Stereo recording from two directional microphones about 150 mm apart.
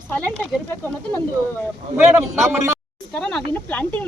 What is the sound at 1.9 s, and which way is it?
Speech, 15° right (ahead or behind).